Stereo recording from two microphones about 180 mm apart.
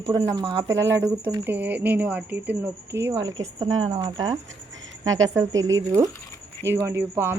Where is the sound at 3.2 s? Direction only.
90° right.